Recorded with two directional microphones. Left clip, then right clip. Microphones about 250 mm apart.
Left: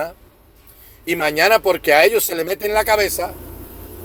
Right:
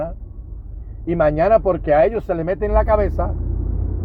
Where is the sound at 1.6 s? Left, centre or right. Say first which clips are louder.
Left 2 dB; left.